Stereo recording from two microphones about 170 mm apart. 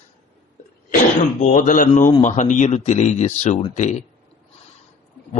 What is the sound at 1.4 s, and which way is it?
A man's voice, 50° left (ahead or behind).